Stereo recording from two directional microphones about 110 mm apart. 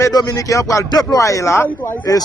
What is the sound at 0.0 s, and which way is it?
A man's voice, 35° left (ahead or behind).